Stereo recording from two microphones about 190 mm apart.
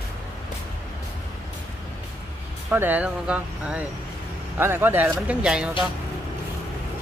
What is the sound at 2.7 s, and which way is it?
Speech, 10° right (ahead or behind).